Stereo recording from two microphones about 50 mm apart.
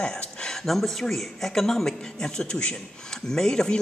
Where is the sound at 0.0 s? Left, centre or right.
Centre.